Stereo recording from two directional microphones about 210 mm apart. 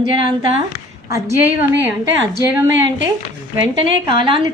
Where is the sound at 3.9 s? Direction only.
25° right (ahead or behind).